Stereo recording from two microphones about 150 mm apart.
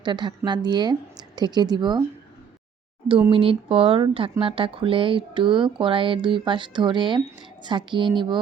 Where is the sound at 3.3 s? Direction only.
35° right (ahead or behind).